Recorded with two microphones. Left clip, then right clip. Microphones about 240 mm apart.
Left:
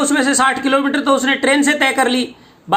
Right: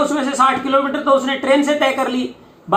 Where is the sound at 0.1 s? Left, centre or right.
Left.